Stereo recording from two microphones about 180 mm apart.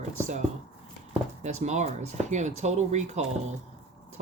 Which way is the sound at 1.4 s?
40° right (ahead or behind).